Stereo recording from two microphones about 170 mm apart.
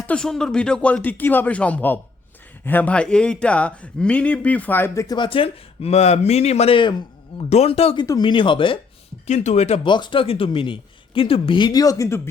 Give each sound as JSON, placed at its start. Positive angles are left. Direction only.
{"t": 0.1, "sound": "speech", "side_deg": 5}
{"t": 8.0, "sound": "speech", "side_deg": 25}
{"t": 9.2, "sound": "speech", "side_deg": 45}